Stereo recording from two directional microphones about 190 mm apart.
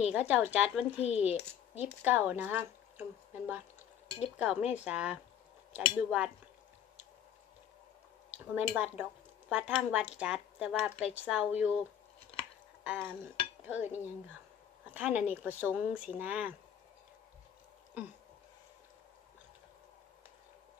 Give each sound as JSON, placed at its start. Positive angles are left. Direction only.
{"t": 0.0, "sound": "speech", "side_deg": -5}
{"t": 1.0, "sound": "speech", "side_deg": 35}
{"t": 2.0, "sound": "speech", "side_deg": -10}
{"t": 8.5, "sound": "speech", "side_deg": -10}
{"t": 12.8, "sound": "dishes", "side_deg": -5}
{"t": 13.7, "sound": "speech", "side_deg": -10}